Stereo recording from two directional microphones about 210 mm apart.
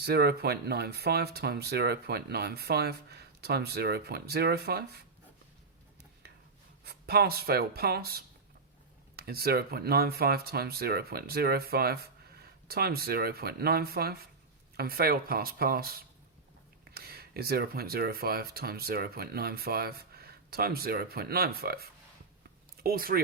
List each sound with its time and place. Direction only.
0.0 s speech: 50° right (ahead or behind)
6.8 s speech: 50° right (ahead or behind)